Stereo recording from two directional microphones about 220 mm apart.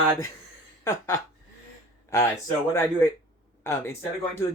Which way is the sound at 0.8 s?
15° left (ahead or behind).